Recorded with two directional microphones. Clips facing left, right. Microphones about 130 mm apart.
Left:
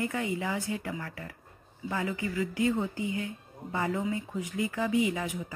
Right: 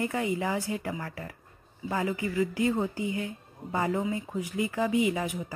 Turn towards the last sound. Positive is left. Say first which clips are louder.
# right 2 dB
turn(degrees=-25)  # may be behind; listen again after turning